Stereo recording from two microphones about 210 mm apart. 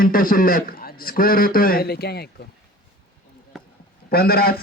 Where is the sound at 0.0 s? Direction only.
40° left (ahead or behind).